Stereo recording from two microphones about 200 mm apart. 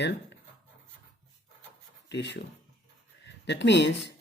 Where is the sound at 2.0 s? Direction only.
60° left (ahead or behind).